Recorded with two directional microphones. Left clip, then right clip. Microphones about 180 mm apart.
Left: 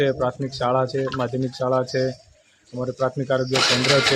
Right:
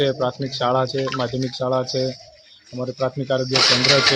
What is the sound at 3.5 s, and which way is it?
Speech, 35° left (ahead or behind).